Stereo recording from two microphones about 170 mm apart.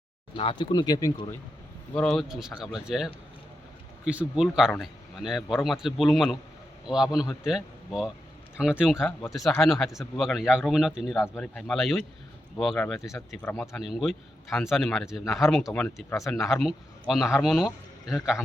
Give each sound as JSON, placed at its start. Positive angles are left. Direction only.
{"t": 0.3, "sound": "speech", "side_deg": 30}
{"t": 2.0, "sound": "a man's voice", "side_deg": 0}